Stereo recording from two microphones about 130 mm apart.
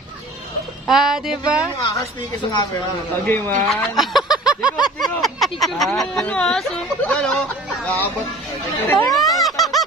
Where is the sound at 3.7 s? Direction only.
Centre (ahead or behind).